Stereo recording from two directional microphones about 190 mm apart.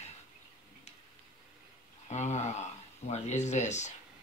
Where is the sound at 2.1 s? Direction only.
35° left (ahead or behind).